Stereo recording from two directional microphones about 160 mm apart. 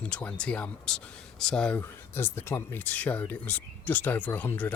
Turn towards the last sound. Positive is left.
turn(degrees=10)  # may be behind; listen again after turning